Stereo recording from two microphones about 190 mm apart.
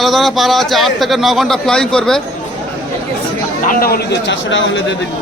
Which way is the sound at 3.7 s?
50° left (ahead or behind).